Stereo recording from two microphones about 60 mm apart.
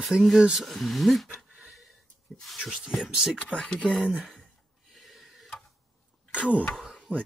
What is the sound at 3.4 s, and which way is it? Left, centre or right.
Speech, centre.